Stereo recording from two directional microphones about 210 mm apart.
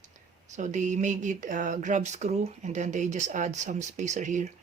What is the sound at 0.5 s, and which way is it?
Speech, 35° right (ahead or behind).